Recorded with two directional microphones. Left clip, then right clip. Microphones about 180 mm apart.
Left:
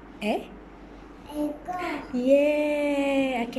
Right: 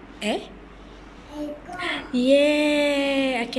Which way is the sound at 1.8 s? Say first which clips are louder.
Right 7 dB; 5° left (ahead or behind).